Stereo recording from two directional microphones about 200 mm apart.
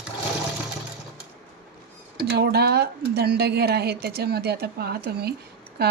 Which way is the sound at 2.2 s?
55° right (ahead or behind).